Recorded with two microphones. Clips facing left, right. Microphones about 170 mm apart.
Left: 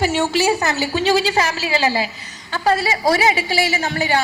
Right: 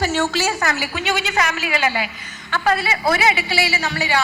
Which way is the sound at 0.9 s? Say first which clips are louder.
Left 8 dB; 35° left (ahead or behind).